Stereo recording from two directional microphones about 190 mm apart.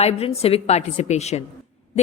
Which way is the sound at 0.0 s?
35° left (ahead or behind).